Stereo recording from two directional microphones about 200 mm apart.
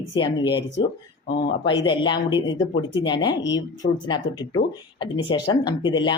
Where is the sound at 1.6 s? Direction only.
25° left (ahead or behind).